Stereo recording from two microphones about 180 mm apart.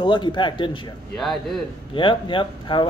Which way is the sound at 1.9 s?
30° left (ahead or behind).